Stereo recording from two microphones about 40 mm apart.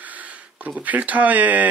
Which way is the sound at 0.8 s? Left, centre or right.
Right.